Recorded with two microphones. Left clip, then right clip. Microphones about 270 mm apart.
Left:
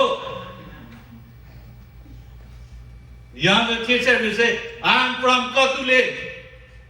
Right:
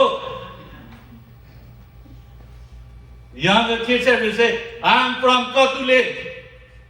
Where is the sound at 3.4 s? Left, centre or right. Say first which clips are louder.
Right 1 dB; right.